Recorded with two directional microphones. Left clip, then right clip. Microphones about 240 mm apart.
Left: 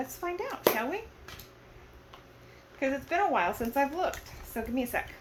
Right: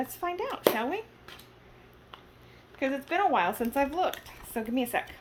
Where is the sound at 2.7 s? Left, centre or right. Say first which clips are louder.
Even; right.